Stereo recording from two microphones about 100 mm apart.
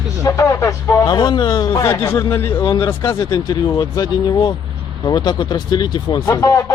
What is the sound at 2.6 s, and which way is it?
Speech, 55° left (ahead or behind).